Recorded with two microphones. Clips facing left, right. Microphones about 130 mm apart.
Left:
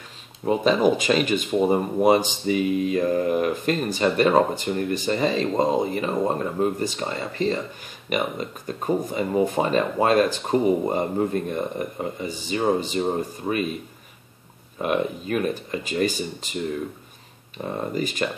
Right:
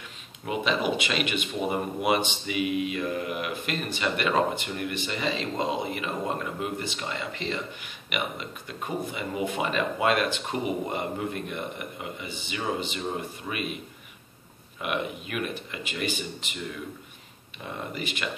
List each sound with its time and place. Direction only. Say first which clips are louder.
0.5 s speech: left 8 dB; 40° left (ahead or behind)
14.8 s speech: left 7 dB; 35° left (ahead or behind)
17.6 s speech: left 7 dB; 40° left (ahead or behind)